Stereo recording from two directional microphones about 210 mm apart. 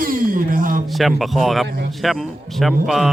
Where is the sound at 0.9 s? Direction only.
Centre (ahead or behind).